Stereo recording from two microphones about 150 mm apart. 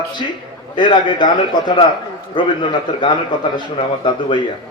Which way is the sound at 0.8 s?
30° left (ahead or behind).